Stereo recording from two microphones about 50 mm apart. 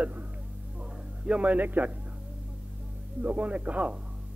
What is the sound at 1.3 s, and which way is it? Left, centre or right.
Speech, right.